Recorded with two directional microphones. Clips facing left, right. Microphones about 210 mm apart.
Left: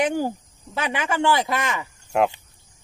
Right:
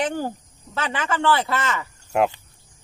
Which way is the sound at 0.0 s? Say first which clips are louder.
Left 3 dB; 10° left (ahead or behind).